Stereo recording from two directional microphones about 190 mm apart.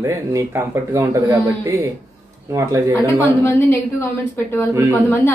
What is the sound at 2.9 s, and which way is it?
A woman's voice, 15° left (ahead or behind).